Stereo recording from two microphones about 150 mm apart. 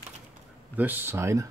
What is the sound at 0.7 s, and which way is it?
Speech, 10° right (ahead or behind).